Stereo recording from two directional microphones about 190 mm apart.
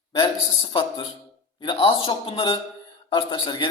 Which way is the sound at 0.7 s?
25° left (ahead or behind).